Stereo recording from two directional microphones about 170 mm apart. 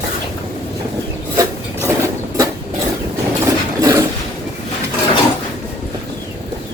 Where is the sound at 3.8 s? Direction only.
20° right (ahead or behind).